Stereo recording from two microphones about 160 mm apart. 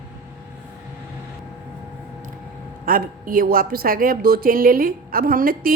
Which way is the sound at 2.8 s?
65° right (ahead or behind).